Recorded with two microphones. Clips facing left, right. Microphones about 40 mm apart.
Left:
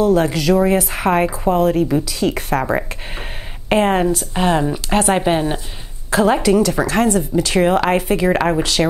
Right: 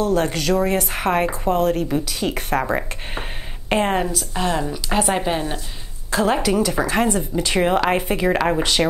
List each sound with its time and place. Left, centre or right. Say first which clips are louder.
0.0 s a woman's voice: left 5 dB; centre
4.4 s a woman's voice: left 4 dB; centre
6.0 s a woman's voice: left 5 dB; centre